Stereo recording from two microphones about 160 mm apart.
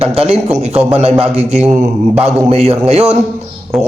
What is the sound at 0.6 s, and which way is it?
Speech, 40° right (ahead or behind).